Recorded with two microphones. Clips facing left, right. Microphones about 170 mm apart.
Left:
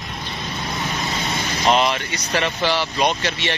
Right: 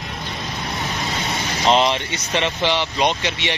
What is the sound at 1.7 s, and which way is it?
Speech, 25° right (ahead or behind).